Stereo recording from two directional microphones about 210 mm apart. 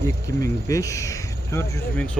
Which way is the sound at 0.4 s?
15° left (ahead or behind).